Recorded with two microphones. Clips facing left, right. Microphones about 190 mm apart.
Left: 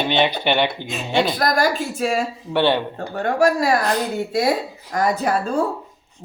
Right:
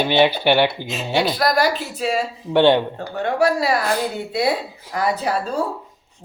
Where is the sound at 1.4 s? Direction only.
45° left (ahead or behind).